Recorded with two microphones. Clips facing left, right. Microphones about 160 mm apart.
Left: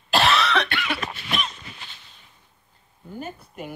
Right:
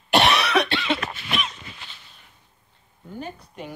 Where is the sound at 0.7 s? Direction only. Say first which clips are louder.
Right 4 dB; 25° right (ahead or behind).